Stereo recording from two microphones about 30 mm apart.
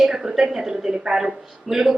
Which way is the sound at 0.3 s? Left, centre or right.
Centre.